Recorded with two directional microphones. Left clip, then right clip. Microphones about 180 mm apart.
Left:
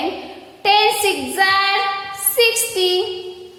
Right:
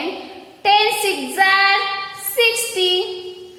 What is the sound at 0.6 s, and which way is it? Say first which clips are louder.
Child singing: left 1 dB; 10° left (ahead or behind).